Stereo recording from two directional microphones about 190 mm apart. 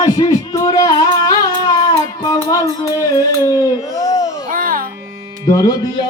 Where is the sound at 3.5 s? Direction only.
20° left (ahead or behind).